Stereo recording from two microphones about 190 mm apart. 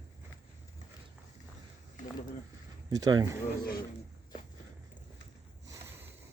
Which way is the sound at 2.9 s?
20° right (ahead or behind).